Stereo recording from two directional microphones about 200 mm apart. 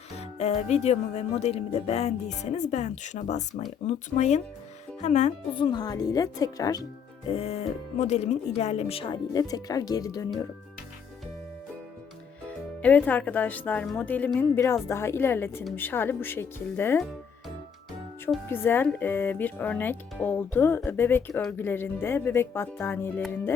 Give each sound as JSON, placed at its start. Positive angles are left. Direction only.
{"t": 0.2, "sound": "speech", "side_deg": 30}
{"t": 5.7, "sound": "speech", "side_deg": 20}
{"t": 7.3, "sound": "speech", "side_deg": 30}
{"t": 12.5, "sound": "speech", "side_deg": 5}
{"t": 18.4, "sound": "speech", "side_deg": 10}